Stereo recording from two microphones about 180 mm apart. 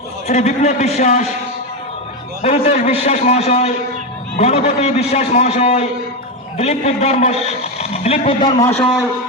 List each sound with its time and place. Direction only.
0.3 s a man's voice: 40° left (ahead or behind)
2.4 s a man's voice: 40° left (ahead or behind)